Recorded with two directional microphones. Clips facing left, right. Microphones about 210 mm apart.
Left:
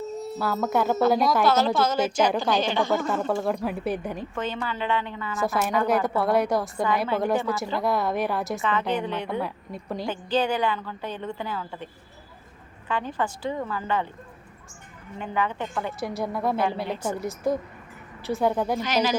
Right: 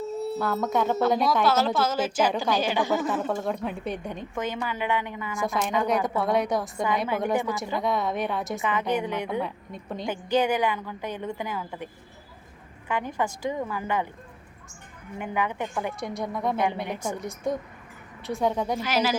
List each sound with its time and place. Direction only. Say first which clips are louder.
0.3 s a woman's voice: left 2 dB; 5° left (ahead or behind)
4.4 s a woman's voice: right 2 dB; 10° right (ahead or behind)
5.9 s a woman's voice: left 2 dB; centre (ahead or behind)
8.6 s a woman's voice: right 1 dB; 10° right (ahead or behind)
12.9 s a woman's voice: even; 10° right (ahead or behind)
15.2 s a woman's voice: left 1 dB; 15° right (ahead or behind)
16.0 s a woman's voice: left 2 dB; 5° left (ahead or behind)
16.6 s a woman's voice: left 1 dB; 20° right (ahead or behind)
17.1 s a woman's voice: left 4 dB; 5° left (ahead or behind)